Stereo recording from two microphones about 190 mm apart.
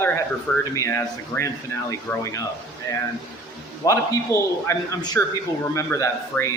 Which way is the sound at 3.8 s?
20° left (ahead or behind).